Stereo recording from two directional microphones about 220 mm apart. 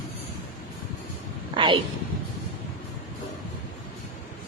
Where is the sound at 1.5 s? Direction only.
20° right (ahead or behind).